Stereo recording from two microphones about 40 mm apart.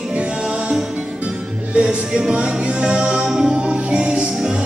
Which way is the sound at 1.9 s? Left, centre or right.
Right.